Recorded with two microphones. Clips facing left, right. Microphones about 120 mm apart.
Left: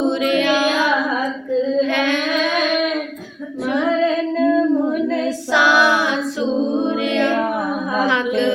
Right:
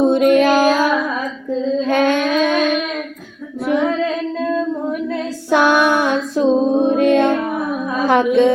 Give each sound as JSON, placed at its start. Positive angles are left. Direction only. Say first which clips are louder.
{"t": 0.0, "sound": "music", "louder": "right 5 dB", "side_deg": -50}
{"t": 1.9, "sound": "a sound", "louder": "right 4 dB", "side_deg": -45}
{"t": 5.5, "sound": "music", "louder": "right 3 dB", "side_deg": -55}